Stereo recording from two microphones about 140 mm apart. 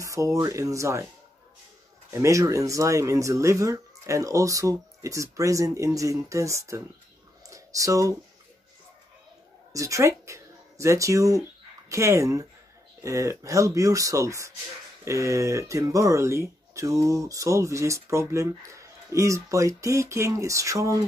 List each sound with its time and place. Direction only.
0.0 s speech: 20° right (ahead or behind)
2.0 s speech: 20° right (ahead or behind)
7.4 s a sound: 25° right (ahead or behind)
9.7 s speech: 25° right (ahead or behind)